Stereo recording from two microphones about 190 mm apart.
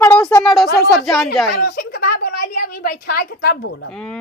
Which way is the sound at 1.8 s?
55° left (ahead or behind).